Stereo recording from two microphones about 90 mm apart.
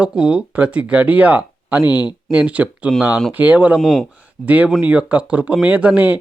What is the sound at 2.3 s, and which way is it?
Speech, 15° right (ahead or behind).